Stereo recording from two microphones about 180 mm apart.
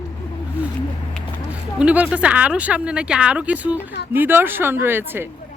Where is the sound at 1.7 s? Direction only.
5° right (ahead or behind).